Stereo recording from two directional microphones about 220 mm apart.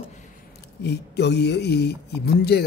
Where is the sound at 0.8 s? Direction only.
50° left (ahead or behind).